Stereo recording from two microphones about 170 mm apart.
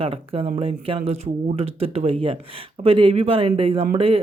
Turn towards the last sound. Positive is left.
turn(degrees=-35)  # may be behind; listen again after turning